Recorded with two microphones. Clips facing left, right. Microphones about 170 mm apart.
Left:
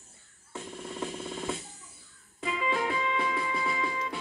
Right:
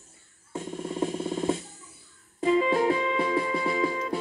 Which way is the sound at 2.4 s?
35° right (ahead or behind).